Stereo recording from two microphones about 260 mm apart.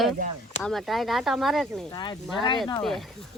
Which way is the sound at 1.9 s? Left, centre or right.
Centre.